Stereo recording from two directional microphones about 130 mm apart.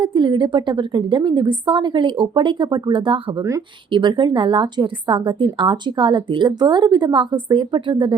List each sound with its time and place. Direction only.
0.0 s a woman's voice: 35° right (ahead or behind)